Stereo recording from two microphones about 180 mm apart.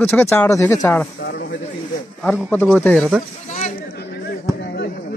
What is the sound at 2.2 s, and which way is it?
Speech, 10° left (ahead or behind).